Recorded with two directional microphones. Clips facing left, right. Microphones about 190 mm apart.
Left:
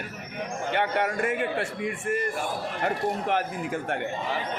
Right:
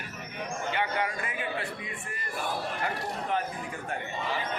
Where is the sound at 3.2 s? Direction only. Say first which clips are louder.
Left 4 dB; 80° left.